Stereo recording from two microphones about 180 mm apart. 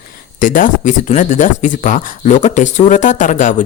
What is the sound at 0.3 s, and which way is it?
Speech, 45° left (ahead or behind).